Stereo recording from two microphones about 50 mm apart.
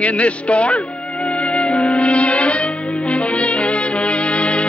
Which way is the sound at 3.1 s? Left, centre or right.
Left.